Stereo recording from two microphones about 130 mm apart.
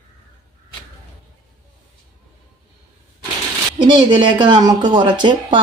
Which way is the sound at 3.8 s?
35° right (ahead or behind).